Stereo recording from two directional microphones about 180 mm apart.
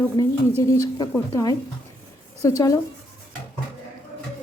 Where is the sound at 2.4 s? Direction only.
15° left (ahead or behind).